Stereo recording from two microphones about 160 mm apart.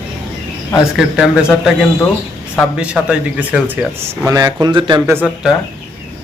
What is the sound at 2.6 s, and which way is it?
Speech, 5° right (ahead or behind).